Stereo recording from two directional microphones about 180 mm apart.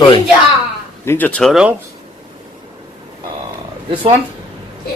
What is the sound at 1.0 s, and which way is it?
Speech, 10° left (ahead or behind).